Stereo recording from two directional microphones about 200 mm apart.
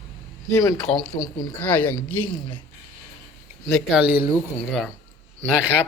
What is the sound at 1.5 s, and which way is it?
Speech, 10° left (ahead or behind).